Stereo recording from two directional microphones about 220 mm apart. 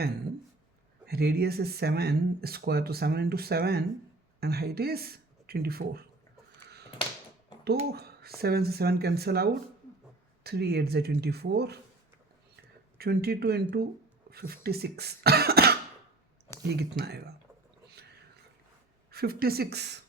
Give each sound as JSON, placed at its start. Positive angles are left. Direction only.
{"t": 1.0, "sound": "speech", "side_deg": -45}
{"t": 7.9, "sound": "a sound", "side_deg": -45}
{"t": 8.4, "sound": "speech", "side_deg": -45}
{"t": 13.0, "sound": "speech", "side_deg": -45}
{"t": 19.1, "sound": "speech", "side_deg": -45}